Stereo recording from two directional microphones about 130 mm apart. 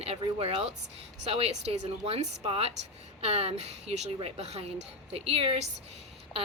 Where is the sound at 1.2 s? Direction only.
55° right (ahead or behind).